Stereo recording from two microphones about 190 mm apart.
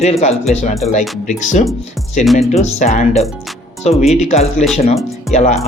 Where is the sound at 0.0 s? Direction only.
35° left (ahead or behind).